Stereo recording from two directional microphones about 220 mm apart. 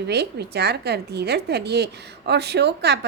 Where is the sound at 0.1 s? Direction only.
50° right (ahead or behind).